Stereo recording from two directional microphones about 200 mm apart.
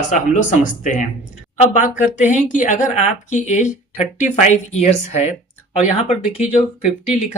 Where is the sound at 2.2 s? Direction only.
40° left (ahead or behind).